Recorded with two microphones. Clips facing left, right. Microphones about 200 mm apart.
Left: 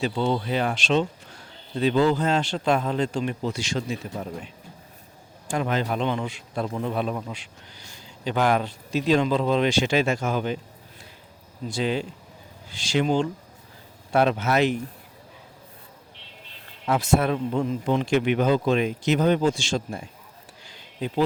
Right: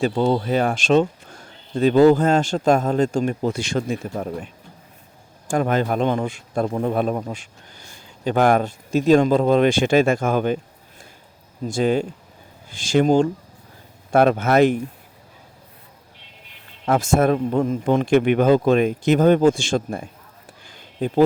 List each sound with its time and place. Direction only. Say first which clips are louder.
0.0 s speech: right 5 dB; 45° right (ahead or behind)
11.6 s speech: right 6 dB; 50° right (ahead or behind)
16.8 s speech: right 4 dB; 50° right (ahead or behind)
20.7 s a sound: right 6 dB; 50° right (ahead or behind)